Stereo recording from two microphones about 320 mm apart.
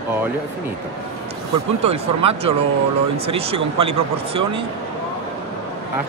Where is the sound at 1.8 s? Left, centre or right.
Centre.